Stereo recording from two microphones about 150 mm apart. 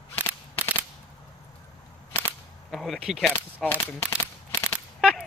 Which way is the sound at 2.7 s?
Centre (ahead or behind).